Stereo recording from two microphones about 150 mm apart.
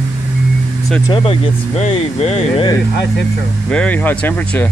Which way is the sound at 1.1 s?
40° left (ahead or behind).